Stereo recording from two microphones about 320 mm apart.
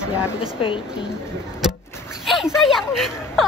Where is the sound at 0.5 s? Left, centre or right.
Centre.